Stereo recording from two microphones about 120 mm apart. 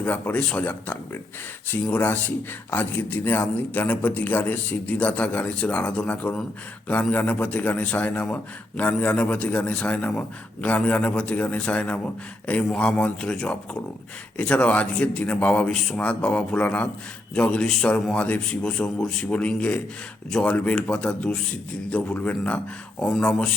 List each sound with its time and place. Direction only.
0.0 s a man's voice: 10° left (ahead or behind)